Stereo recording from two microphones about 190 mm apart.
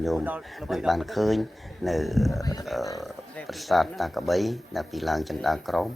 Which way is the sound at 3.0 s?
Centre (ahead or behind).